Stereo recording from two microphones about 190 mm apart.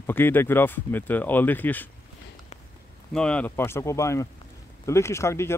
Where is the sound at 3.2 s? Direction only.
5° left (ahead or behind).